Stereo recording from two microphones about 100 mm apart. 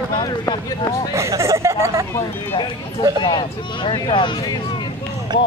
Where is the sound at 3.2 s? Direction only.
55° left (ahead or behind).